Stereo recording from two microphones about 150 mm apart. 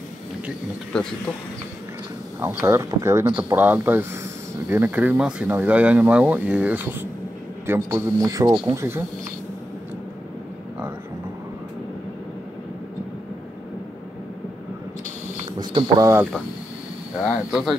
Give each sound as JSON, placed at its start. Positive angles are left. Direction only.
{"t": 2.4, "sound": "a man's voice", "side_deg": -15}
{"t": 15.6, "sound": "speech", "side_deg": -30}
{"t": 17.2, "sound": "speech", "side_deg": 0}